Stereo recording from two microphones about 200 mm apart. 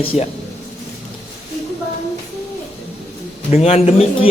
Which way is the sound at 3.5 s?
30° left (ahead or behind).